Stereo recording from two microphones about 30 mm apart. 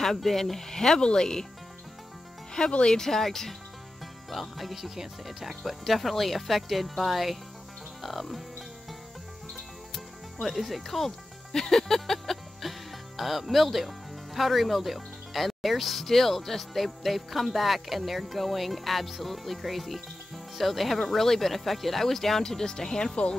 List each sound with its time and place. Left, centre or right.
0.0 s speech: centre
2.6 s speech: left
4.3 s speech: centre
9.5 s music: centre
11.5 s speech: centre